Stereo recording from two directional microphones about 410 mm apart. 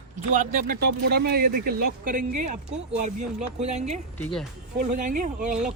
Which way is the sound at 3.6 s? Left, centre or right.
Centre.